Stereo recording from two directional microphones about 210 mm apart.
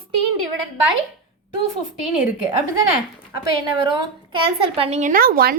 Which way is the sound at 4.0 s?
25° right (ahead or behind).